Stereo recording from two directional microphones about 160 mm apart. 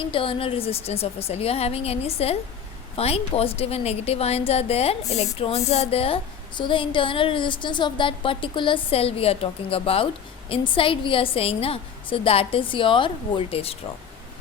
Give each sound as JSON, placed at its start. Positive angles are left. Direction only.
{"t": 0.1, "sound": "a woman's voice", "side_deg": 35}